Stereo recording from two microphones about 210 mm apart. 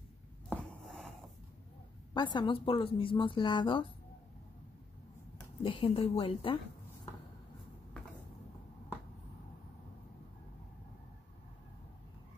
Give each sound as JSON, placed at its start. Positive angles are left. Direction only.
{"t": 0.5, "sound": "a sound", "side_deg": 5}
{"t": 2.1, "sound": "speech", "side_deg": 20}
{"t": 5.6, "sound": "speech", "side_deg": 25}